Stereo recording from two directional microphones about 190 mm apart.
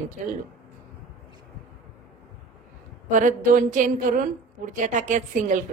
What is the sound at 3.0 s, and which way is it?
A woman's voice, 45° right (ahead or behind).